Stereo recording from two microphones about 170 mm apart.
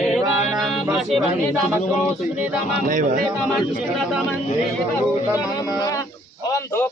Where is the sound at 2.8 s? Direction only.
50° right (ahead or behind).